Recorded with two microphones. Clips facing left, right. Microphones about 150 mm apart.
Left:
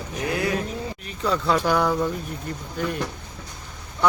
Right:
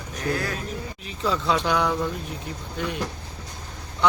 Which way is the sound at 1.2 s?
Centre (ahead or behind).